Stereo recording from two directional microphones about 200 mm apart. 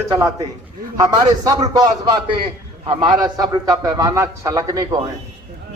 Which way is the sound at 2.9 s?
20° right (ahead or behind).